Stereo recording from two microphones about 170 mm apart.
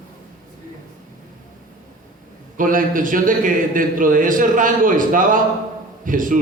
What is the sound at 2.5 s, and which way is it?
A man's voice, 50° right (ahead or behind).